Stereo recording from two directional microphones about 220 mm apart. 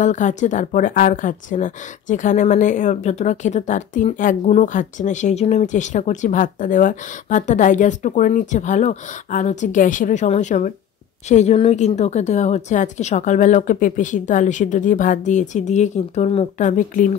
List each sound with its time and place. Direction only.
0.0 s speech: 35° left (ahead or behind)